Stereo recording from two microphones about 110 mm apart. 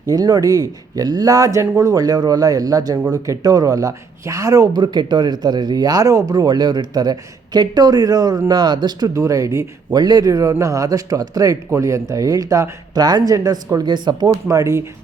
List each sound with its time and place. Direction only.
0.1 s speech: 35° right (ahead or behind)